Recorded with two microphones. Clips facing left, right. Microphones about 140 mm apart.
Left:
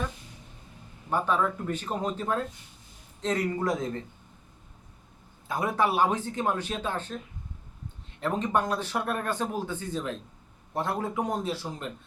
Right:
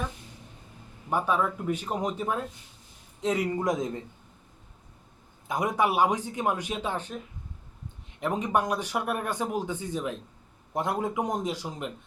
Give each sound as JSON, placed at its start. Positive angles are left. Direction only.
{"t": 1.1, "sound": "speech", "side_deg": -10}
{"t": 5.5, "sound": "speech", "side_deg": -15}
{"t": 8.2, "sound": "speech", "side_deg": -15}